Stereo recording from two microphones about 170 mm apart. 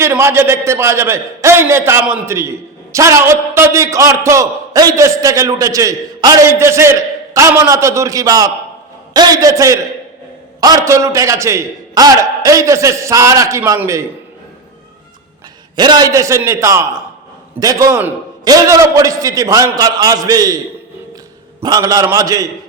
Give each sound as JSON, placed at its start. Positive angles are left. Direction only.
{"t": 0.0, "sound": "a man's voice", "side_deg": -15}
{"t": 15.7, "sound": "a man's voice", "side_deg": -25}
{"t": 21.6, "sound": "a man's voice", "side_deg": -20}